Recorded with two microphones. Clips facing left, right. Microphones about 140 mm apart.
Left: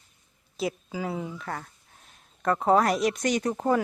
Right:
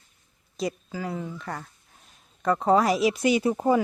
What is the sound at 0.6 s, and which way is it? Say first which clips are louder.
Clang: even; 5° left (ahead or behind).